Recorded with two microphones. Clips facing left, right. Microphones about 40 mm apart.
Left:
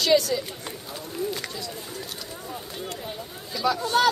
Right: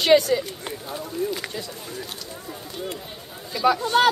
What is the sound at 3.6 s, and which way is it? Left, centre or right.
Speech, right.